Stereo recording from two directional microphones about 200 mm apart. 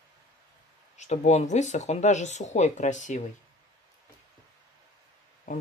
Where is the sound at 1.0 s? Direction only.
35° left (ahead or behind).